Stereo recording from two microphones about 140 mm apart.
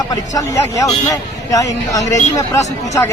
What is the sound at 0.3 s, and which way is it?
Speech, 25° left (ahead or behind).